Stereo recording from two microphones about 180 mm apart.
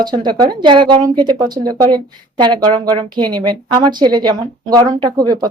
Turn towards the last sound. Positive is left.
turn(degrees=-20)  # may be behind; listen again after turning